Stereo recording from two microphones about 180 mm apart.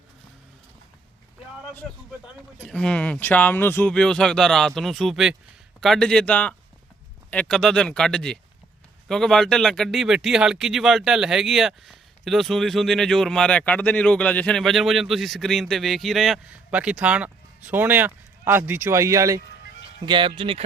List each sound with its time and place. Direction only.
2.2 s speech: 5° left (ahead or behind); by 20.7 s 30° right (ahead or behind)